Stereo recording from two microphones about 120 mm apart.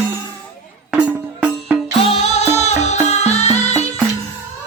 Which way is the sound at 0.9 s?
15° right (ahead or behind).